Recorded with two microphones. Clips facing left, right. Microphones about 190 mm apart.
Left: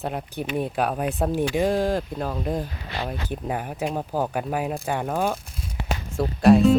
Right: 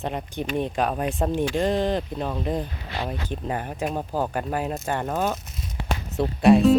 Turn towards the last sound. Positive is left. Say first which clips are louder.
# even
turn(degrees=0)  # may be behind; listen again after turning